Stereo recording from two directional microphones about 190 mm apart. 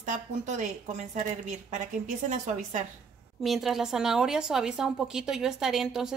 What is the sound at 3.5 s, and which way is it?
A woman's voice, centre (ahead or behind).